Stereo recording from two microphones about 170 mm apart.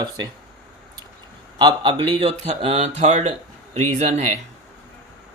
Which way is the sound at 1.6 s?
25° right (ahead or behind).